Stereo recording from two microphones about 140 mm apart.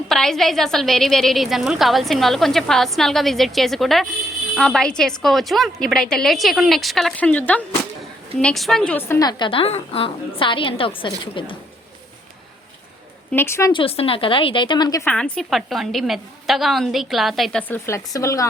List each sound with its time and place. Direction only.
0.1 s a woman's voice: 5° left (ahead or behind); by 9.5 s 25° left (ahead or behind)
9.5 s a woman's voice: 45° left (ahead or behind)
13.3 s speech: 20° left (ahead or behind)
13.7 s a woman's voice: 40° left (ahead or behind)
15.0 s a woman's voice: 5° left (ahead or behind)
17.6 s speech: 15° left (ahead or behind)